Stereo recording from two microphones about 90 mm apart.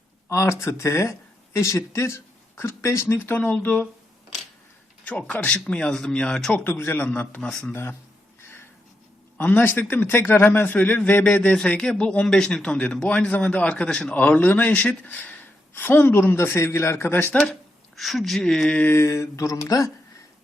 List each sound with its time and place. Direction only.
0.3 s speech: 35° left (ahead or behind)
5.0 s speech: 15° left (ahead or behind)
6.5 s speech: 25° left (ahead or behind)
8.4 s a sound: 30° left (ahead or behind)
9.4 s speech: 20° left (ahead or behind)
17.5 s speech: centre (ahead or behind)
18.9 s speech: 30° left (ahead or behind)